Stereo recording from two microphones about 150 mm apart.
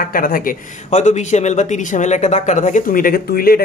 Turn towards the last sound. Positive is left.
turn(degrees=85)